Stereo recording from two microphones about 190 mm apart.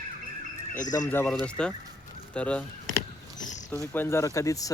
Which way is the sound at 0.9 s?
15° left (ahead or behind).